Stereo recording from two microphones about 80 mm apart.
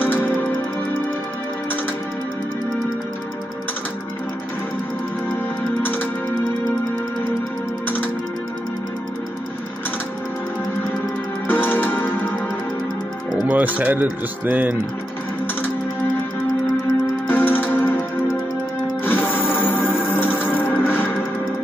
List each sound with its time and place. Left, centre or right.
0.0 s music: left
5.8 s music: left
11.4 s music: left
13.5 s speech: centre
17.3 s music: left
19.0 s music: left